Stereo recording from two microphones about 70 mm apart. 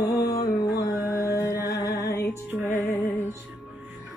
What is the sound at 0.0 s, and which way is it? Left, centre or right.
Music, left.